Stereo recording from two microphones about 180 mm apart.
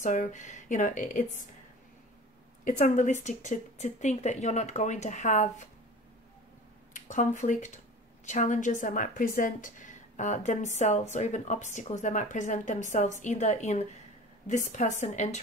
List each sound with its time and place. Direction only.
0.0 s a woman's voice: 45° left (ahead or behind)
2.6 s speech: 45° left (ahead or behind)
6.9 s a woman's voice: 45° left (ahead or behind)